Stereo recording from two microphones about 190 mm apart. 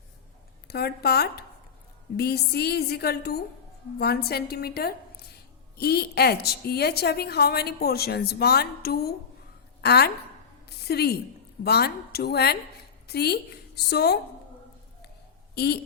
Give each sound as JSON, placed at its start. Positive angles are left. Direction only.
{"t": 0.7, "sound": "a woman's voice", "side_deg": 55}
{"t": 15.5, "sound": "speech", "side_deg": 60}